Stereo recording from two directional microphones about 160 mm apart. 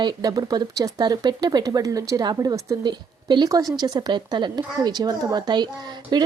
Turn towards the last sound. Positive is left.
turn(degrees=-25)  # may be behind; listen again after turning